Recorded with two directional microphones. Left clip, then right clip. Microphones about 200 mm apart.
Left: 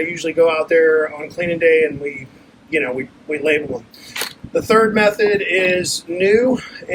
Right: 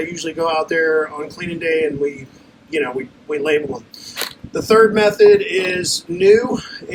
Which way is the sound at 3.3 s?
20° right (ahead or behind).